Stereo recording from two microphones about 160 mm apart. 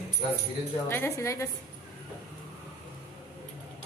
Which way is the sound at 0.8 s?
15° left (ahead or behind).